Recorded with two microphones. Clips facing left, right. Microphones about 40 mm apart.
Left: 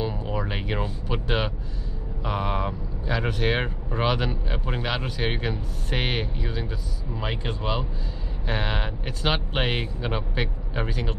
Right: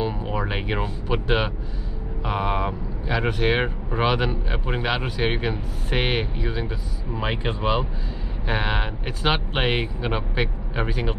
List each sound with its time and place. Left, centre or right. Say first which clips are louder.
0.0 s speech: right 3 dB; centre